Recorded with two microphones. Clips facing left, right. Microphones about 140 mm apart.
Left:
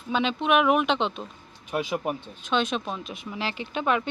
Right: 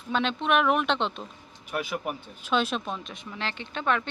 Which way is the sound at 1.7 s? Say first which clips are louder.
Left 3 dB; 20° left (ahead or behind).